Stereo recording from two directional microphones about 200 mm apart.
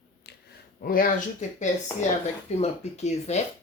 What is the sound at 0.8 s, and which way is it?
Speech, 45° left (ahead or behind).